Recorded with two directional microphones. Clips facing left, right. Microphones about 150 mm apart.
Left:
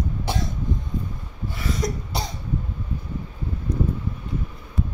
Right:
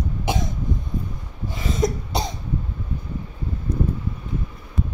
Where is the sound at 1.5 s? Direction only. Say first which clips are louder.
Right 4 dB; 20° right (ahead or behind).